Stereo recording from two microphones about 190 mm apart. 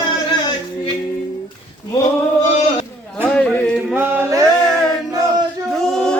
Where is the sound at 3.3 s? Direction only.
5° left (ahead or behind).